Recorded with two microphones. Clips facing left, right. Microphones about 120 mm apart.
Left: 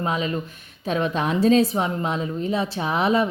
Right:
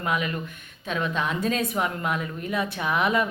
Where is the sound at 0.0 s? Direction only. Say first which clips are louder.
Left 3 dB; 30° left (ahead or behind).